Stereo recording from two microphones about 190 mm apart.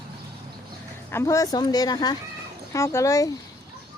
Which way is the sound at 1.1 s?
15° left (ahead or behind).